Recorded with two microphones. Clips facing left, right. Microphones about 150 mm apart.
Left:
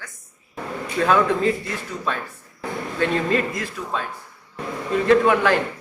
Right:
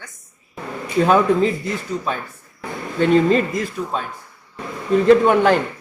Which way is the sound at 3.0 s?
25° right (ahead or behind).